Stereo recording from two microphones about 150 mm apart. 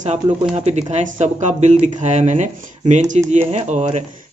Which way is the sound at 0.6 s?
50° right (ahead or behind).